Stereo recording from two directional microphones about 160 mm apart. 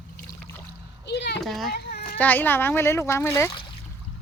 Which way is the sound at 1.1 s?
90° left.